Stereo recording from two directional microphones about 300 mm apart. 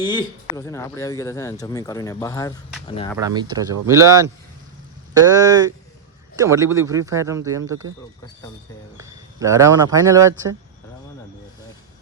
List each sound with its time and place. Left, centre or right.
0.0 s speech: centre
3.2 s speech: centre
9.0 s speech: centre